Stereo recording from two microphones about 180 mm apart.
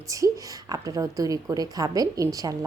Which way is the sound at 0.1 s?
20° right (ahead or behind).